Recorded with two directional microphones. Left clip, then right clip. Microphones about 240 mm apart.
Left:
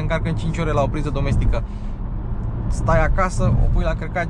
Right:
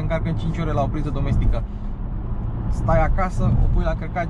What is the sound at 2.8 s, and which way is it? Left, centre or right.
Speech, left.